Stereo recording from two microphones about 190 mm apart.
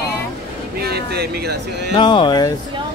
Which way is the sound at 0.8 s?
55° right (ahead or behind).